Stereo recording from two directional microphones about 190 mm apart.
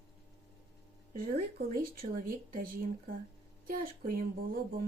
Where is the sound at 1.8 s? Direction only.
50° right (ahead or behind).